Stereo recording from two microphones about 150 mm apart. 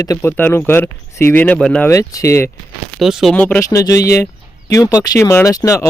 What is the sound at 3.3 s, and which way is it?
Speech, 10° left (ahead or behind).